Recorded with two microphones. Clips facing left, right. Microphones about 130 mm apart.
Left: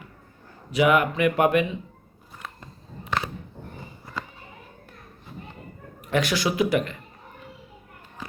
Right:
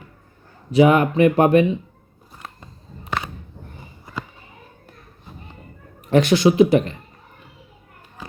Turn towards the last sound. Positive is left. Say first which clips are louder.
# right 8 dB
turn(degrees=-30)  # may be behind; listen again after turning